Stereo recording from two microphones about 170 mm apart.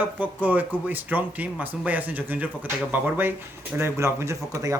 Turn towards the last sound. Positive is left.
turn(degrees=-15)  # may be behind; listen again after turning